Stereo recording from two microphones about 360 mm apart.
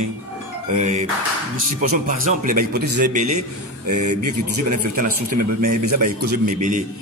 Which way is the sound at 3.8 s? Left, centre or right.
Right.